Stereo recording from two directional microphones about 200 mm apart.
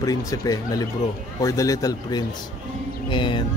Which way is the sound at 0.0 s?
15° left (ahead or behind).